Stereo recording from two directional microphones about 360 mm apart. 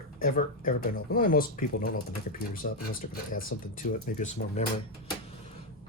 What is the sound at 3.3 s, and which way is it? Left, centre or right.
Speech, left.